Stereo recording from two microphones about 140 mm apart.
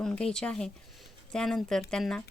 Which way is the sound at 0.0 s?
5° left (ahead or behind).